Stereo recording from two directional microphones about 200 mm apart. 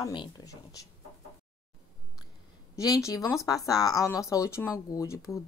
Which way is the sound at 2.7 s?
15° left (ahead or behind).